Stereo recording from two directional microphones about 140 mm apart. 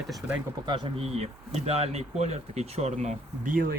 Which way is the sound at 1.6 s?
50° right (ahead or behind).